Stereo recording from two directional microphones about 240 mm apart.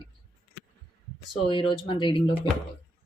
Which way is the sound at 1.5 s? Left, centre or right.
Left.